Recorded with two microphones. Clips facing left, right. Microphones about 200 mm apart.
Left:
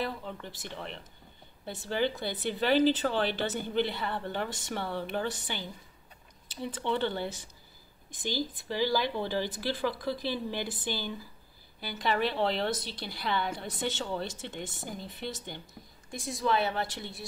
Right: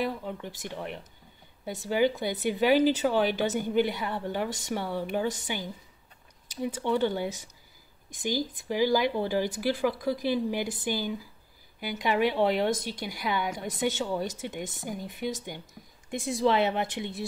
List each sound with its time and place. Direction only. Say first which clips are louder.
0.0 s speech: right 4 dB; 10° right (ahead or behind)
6.6 s speech: right 4 dB; 10° right (ahead or behind)
16.1 s a woman's voice: right 5 dB; 25° right (ahead or behind)